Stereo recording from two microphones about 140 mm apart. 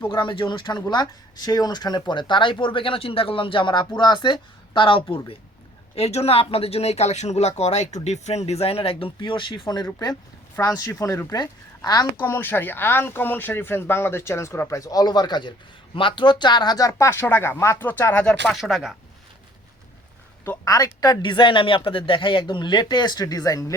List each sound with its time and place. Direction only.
0.1 s speech: 35° left (ahead or behind)
12.2 s speech: 15° left (ahead or behind); by 18.9 s centre (ahead or behind)
20.4 s speech: 20° left (ahead or behind)